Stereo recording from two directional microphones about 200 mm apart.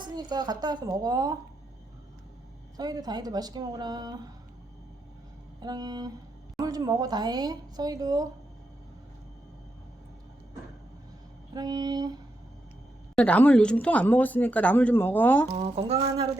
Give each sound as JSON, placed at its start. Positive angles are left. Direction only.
{"t": 0.0, "sound": "speech", "side_deg": -20}
{"t": 2.7, "sound": "speech", "side_deg": -20}
{"t": 5.5, "sound": "speech", "side_deg": -20}
{"t": 11.5, "sound": "speech", "side_deg": -20}
{"t": 13.1, "sound": "speech", "side_deg": 5}
{"t": 15.4, "sound": "speech", "side_deg": -30}